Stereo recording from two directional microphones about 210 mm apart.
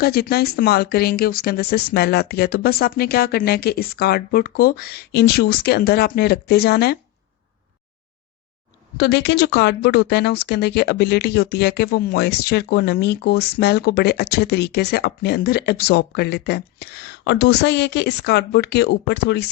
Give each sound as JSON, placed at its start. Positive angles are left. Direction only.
{"t": 0.0, "sound": "speech", "side_deg": 45}
{"t": 9.0, "sound": "speech", "side_deg": 50}